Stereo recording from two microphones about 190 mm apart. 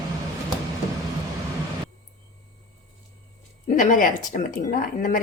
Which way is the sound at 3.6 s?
45° left (ahead or behind).